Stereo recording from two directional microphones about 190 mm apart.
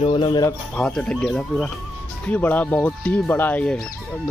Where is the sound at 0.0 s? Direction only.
25° left (ahead or behind).